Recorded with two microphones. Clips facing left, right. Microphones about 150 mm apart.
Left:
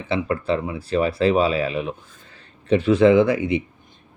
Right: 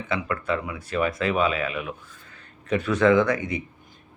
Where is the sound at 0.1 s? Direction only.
30° left (ahead or behind).